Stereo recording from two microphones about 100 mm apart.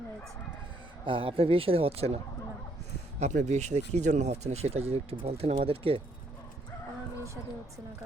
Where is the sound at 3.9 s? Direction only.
90° right; by 6.0 s 70° right (ahead or behind).